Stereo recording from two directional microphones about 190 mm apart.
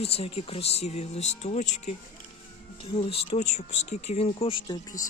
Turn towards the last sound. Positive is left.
turn(degrees=20)  # may be behind; listen again after turning